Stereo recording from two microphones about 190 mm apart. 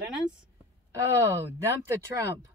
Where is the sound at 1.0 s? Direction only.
15° right (ahead or behind).